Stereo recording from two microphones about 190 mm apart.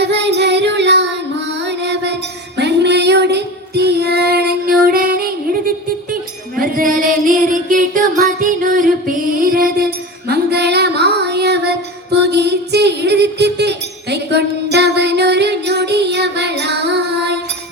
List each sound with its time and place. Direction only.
0.0 s child singing: 65° right (ahead or behind)
1.6 s music: 65° right (ahead or behind)
2.6 s female singing: 60° right (ahead or behind)
6.6 s music: 45° right (ahead or behind)
12.1 s a sound: 60° right (ahead or behind)